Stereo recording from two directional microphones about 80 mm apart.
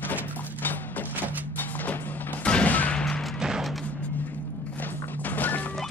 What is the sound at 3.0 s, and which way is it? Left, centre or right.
Music, centre.